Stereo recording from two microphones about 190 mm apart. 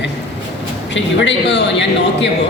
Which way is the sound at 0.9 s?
70° left (ahead or behind).